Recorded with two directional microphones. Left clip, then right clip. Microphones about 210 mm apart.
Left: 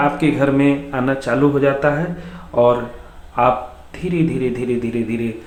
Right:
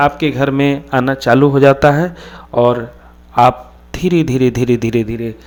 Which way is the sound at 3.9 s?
50° right (ahead or behind).